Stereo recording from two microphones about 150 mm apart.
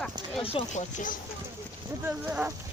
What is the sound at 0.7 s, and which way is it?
Speech, 60° left (ahead or behind).